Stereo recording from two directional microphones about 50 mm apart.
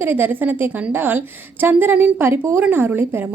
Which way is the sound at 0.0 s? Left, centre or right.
Right.